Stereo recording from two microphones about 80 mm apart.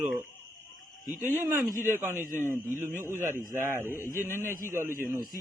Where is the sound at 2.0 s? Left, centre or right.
Right.